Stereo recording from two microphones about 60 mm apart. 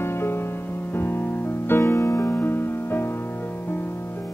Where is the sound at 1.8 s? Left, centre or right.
Left.